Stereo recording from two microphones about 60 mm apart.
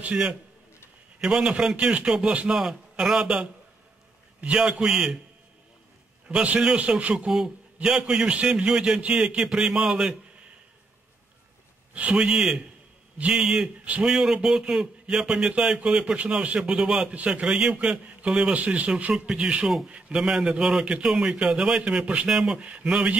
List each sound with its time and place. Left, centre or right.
0.0 s speech: centre
6.2 s a man's voice: right
7.3 s speech: centre
11.9 s speech: centre